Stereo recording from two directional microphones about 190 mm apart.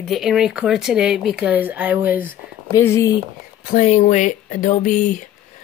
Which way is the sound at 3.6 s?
40° left (ahead or behind).